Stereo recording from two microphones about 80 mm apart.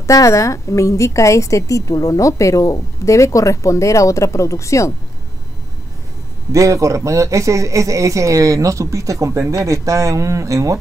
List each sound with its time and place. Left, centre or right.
0.0 s a woman's voice: left
6.5 s speech: right